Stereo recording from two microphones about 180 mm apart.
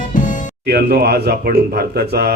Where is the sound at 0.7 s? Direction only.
60° right (ahead or behind).